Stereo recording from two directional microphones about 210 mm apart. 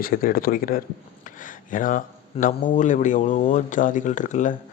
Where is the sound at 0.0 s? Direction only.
45° left (ahead or behind).